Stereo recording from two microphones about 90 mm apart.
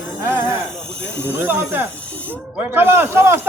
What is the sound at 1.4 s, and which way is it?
Speech, 20° right (ahead or behind).